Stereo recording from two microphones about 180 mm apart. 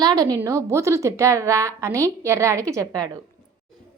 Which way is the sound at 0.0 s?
20° right (ahead or behind).